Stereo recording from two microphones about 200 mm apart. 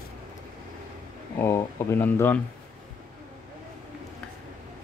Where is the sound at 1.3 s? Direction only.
15° left (ahead or behind).